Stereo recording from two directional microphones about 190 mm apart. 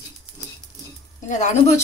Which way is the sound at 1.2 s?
40° left (ahead or behind).